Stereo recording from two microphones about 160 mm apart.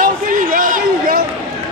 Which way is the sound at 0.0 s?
60° right (ahead or behind).